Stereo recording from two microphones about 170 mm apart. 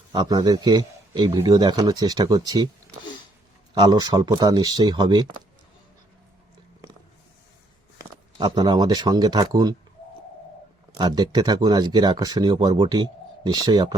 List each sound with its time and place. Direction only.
0.1 s a man's voice: 25° right (ahead or behind)
3.8 s speech: 25° right (ahead or behind)
7.9 s speech: 25° right (ahead or behind)
10.9 s speech: 25° right (ahead or behind)